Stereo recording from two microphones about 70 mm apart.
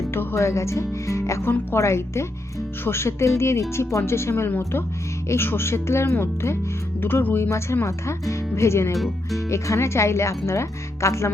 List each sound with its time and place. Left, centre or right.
0.1 s speech: left
7.5 s speech: left